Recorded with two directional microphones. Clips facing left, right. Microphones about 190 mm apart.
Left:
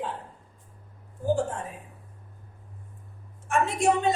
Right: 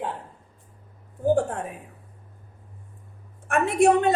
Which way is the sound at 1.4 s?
60° right (ahead or behind).